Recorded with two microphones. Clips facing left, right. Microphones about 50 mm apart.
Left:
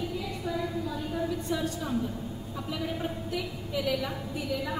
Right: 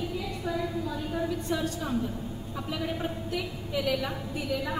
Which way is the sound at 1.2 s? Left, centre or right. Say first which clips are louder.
Right 1 dB; right.